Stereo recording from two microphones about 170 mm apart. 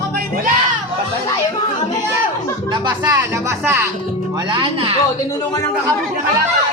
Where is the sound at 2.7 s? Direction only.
25° right (ahead or behind).